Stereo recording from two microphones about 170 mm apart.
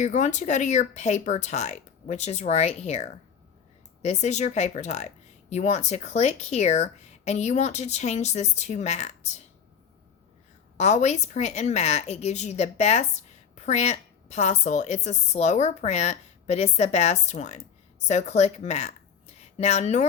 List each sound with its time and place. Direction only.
0.0 s speech: 45° left (ahead or behind)
10.8 s a woman's voice: 40° left (ahead or behind)